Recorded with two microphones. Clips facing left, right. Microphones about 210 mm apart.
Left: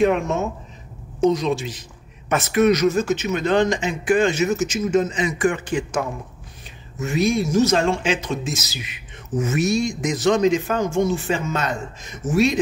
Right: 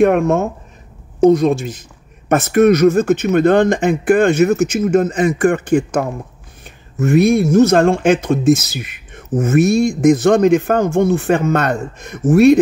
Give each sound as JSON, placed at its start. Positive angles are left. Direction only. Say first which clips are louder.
{"t": 0.0, "sound": "a woman's voice", "louder": "right 6 dB", "side_deg": -55}